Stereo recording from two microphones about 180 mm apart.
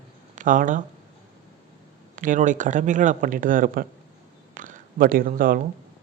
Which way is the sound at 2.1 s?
45° right (ahead or behind).